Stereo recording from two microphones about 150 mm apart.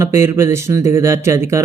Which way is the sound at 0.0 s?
20° right (ahead or behind).